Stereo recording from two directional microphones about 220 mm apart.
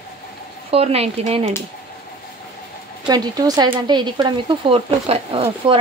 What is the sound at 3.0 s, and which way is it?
Speech, 15° right (ahead or behind).